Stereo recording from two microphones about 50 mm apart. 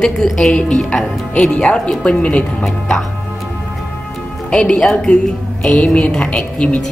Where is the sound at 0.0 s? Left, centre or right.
Centre.